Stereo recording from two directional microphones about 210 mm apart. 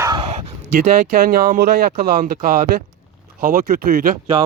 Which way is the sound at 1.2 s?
45° right (ahead or behind).